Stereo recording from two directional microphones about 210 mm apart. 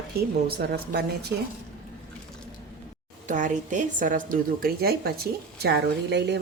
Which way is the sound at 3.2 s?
35° right (ahead or behind).